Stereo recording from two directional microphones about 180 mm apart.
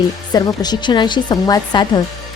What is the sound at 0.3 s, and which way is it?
Speech, 20° left (ahead or behind).